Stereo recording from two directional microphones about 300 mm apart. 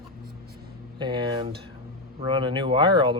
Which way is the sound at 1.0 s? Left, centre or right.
Centre.